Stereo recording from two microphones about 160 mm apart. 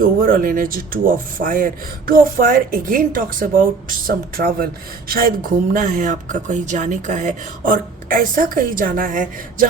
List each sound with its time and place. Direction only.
0.0 s speech: 60° right (ahead or behind)